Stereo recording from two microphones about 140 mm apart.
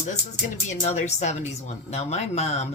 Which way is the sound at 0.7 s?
55° left (ahead or behind).